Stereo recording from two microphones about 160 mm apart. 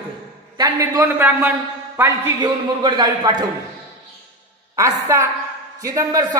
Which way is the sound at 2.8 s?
25° right (ahead or behind).